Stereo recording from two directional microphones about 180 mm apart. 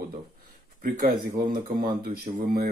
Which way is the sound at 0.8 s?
55° right (ahead or behind).